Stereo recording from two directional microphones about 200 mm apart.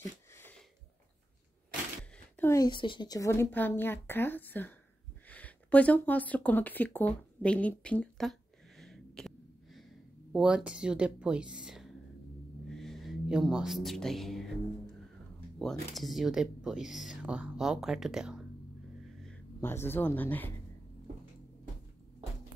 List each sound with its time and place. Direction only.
0.3 s a sound: 10° left (ahead or behind)
2.3 s a woman's voice: 15° left (ahead or behind)
5.3 s a sound: 5° left (ahead or behind)
10.3 s speech: 5° right (ahead or behind)
15.6 s speech: centre (ahead or behind)
19.2 s speech: 10° left (ahead or behind)